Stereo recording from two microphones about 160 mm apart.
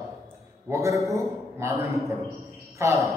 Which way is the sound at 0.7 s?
20° right (ahead or behind).